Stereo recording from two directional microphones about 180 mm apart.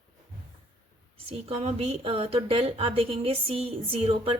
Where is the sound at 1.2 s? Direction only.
35° right (ahead or behind).